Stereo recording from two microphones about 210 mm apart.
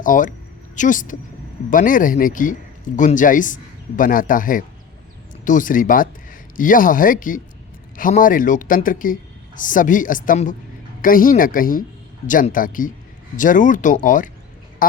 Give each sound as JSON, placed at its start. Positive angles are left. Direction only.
{"t": 0.0, "sound": "a man's voice", "side_deg": 40}